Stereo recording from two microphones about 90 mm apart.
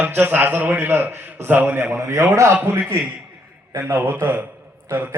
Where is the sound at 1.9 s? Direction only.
35° right (ahead or behind).